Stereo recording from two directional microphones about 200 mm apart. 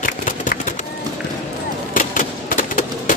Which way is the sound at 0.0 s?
40° left (ahead or behind).